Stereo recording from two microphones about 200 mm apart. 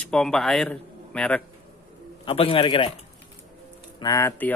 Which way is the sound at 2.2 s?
25° left (ahead or behind).